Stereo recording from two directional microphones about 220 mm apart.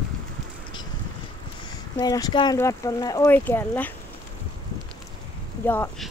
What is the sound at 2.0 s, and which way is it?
Speech, 15° left (ahead or behind).